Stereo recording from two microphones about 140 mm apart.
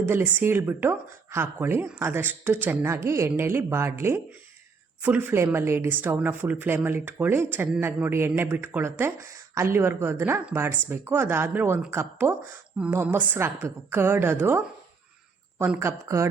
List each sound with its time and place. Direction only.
0.1 s speech: 15° right (ahead or behind)